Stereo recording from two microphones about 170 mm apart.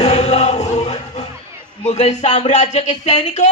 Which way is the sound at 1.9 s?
40° left (ahead or behind).